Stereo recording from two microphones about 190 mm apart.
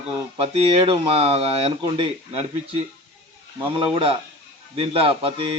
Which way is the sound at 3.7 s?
30° right (ahead or behind).